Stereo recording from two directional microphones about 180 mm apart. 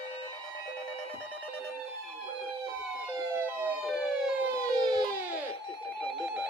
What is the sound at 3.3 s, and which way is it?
Emergency vehicle, 10° right (ahead or behind).